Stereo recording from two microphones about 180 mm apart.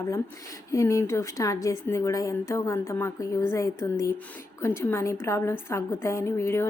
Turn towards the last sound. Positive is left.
turn(degrees=15)  # may be behind; listen again after turning